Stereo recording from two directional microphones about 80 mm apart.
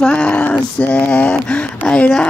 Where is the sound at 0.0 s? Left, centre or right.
Centre.